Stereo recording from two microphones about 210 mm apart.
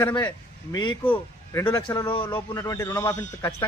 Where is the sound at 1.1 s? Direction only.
10° left (ahead or behind).